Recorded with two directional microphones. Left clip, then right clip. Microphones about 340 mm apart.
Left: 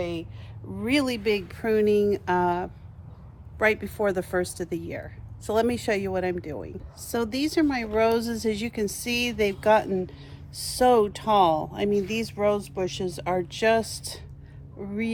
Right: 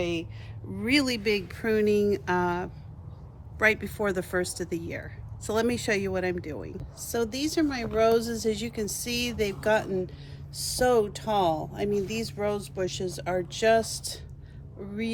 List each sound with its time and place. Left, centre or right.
0.0 s speech: centre
7.0 s speech: centre